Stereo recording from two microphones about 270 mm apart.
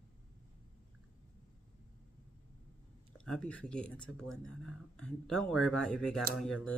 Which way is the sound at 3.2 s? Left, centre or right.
Centre.